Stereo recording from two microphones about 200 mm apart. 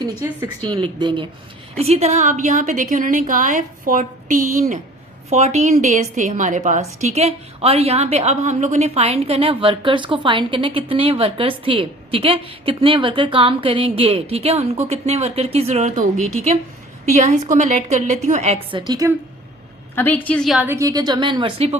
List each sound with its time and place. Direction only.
0.2 s a woman's voice: 15° right (ahead or behind)
20.0 s a woman's voice: 10° left (ahead or behind)
20.7 s a woman's voice: 15° right (ahead or behind)